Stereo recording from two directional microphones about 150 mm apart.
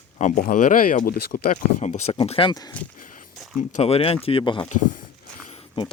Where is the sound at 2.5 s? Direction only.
25° left (ahead or behind).